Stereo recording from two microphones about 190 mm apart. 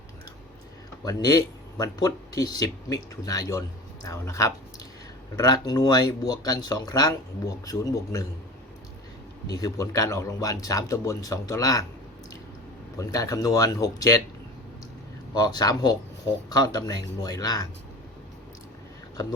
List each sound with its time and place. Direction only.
1.0 s speech: 20° left (ahead or behind)
9.5 s speech: 20° left (ahead or behind)
13.0 s speech: 15° left (ahead or behind)
15.4 s speech: 20° left (ahead or behind)